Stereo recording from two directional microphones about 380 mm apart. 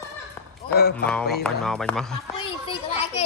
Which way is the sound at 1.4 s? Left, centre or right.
Centre.